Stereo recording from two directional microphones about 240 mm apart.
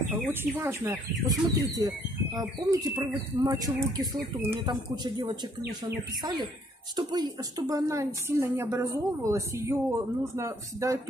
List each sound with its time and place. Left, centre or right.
0.1 s a woman's voice: centre
7.0 s a woman's voice: centre